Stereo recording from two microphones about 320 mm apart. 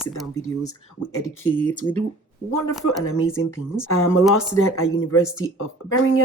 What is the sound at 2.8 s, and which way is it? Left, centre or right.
Speech, left.